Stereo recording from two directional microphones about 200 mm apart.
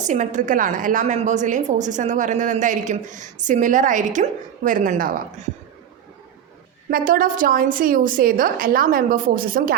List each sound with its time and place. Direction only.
0.0 s a woman's voice: 40° right (ahead or behind)
6.9 s a woman's voice: 45° right (ahead or behind)